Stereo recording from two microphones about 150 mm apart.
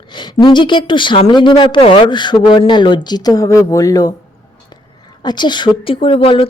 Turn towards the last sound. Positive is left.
turn(degrees=35)  # may be behind; listen again after turning